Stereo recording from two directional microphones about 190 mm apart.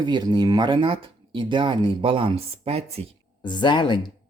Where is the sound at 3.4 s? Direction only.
25° left (ahead or behind).